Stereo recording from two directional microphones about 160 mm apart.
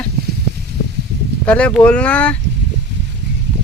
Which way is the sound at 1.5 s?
5° left (ahead or behind).